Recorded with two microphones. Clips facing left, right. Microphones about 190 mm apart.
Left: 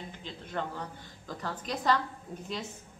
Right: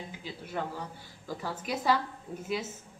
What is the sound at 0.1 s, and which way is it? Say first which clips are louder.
A woman's voice: left 1 dB; 10° right (ahead or behind).